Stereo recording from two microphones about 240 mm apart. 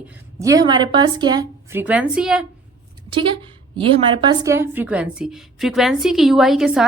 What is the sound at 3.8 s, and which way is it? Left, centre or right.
A woman's voice, centre.